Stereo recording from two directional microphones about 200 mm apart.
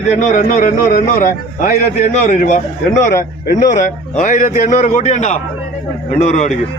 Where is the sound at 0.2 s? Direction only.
40° left (ahead or behind).